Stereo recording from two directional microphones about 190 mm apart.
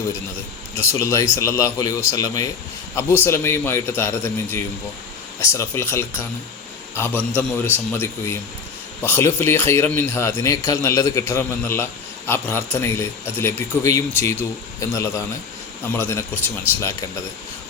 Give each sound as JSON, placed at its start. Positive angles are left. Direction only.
{"t": 0.8, "sound": "speech", "side_deg": 15}